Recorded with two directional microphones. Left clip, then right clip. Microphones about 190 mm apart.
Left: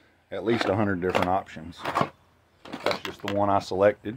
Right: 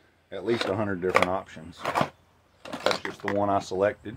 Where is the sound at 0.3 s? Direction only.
55° left (ahead or behind).